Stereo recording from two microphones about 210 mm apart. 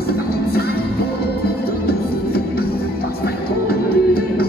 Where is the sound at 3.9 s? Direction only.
45° left (ahead or behind).